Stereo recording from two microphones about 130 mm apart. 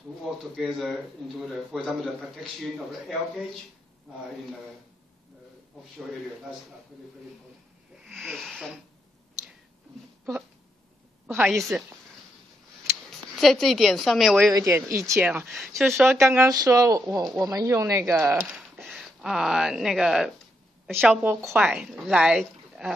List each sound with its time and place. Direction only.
0.2 s speech: centre (ahead or behind)
5.9 s speech: centre (ahead or behind)
8.0 s snake: centre (ahead or behind)
11.4 s speech: centre (ahead or behind)
13.4 s speech: centre (ahead or behind)
14.5 s speech: 25° right (ahead or behind)
15.4 s speech: centre (ahead or behind)
16.2 s speech: 20° right (ahead or behind)
18.5 s a woman's voice: centre (ahead or behind)
21.5 s speech: centre (ahead or behind)